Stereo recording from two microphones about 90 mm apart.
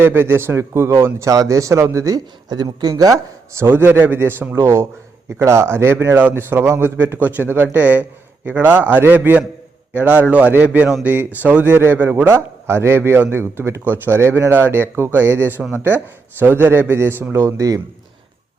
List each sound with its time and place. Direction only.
0.0 s a man's voice: 25° right (ahead or behind)
17.4 s speech: 40° right (ahead or behind)